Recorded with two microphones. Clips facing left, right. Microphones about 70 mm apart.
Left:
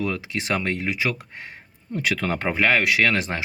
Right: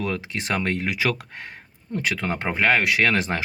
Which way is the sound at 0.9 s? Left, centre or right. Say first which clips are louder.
Right 1 dB; right.